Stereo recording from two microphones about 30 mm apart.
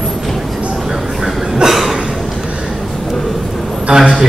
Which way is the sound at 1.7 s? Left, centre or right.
Centre.